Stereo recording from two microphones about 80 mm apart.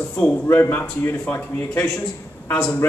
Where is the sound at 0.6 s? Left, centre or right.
Left.